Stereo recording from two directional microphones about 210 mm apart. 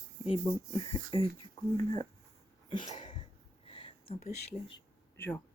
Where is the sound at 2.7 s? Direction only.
20° left (ahead or behind).